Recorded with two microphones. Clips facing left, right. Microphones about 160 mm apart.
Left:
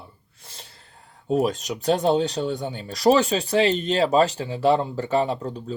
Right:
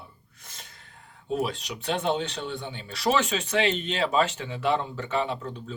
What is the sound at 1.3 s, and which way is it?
Speech, 45° left (ahead or behind).